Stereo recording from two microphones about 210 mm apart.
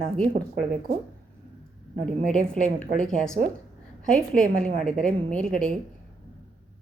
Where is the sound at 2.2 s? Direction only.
5° left (ahead or behind).